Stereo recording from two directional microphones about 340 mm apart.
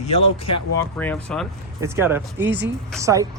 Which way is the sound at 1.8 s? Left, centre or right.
Centre.